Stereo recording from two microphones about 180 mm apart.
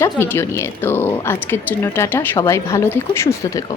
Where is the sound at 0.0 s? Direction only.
15° left (ahead or behind).